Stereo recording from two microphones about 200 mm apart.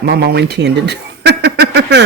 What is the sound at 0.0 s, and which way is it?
Speech, 55° right (ahead or behind).